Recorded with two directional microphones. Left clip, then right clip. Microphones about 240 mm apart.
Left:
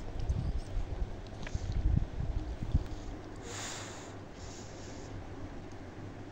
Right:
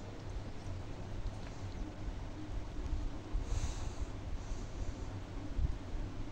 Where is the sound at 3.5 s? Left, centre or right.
Left.